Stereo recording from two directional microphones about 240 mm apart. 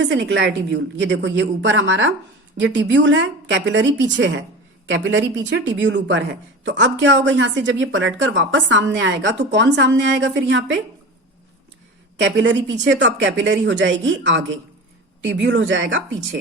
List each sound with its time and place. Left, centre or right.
0.0 s a woman's voice: right
12.2 s a woman's voice: right